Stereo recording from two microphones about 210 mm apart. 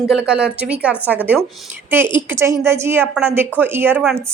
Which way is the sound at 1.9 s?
10° right (ahead or behind).